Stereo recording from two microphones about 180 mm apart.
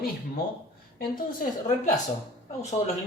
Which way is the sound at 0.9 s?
50° left (ahead or behind).